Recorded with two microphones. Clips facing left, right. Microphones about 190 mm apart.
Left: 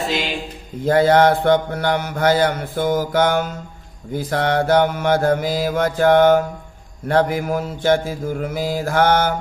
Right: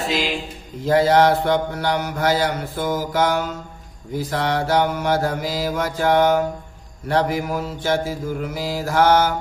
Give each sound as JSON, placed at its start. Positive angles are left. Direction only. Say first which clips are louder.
{"t": 0.0, "sound": "speech", "louder": "even", "side_deg": 0}
{"t": 0.8, "sound": "speech", "louder": "left 2 dB", "side_deg": 55}
{"t": 7.1, "sound": "mantra", "louder": "left 3 dB", "side_deg": 55}